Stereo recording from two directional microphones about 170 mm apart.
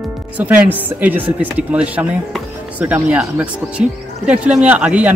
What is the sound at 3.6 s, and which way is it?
Speech, 5° right (ahead or behind).